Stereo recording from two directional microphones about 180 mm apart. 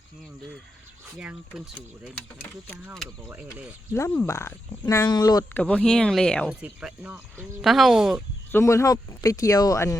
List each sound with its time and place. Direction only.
1.2 s speech: 5° right (ahead or behind)
2.9 s speech: centre (ahead or behind)
3.9 s speech: 15° left (ahead or behind)
5.5 s speech: 5° left (ahead or behind)
6.5 s speech: 5° right (ahead or behind)
8.5 s speech: 15° left (ahead or behind)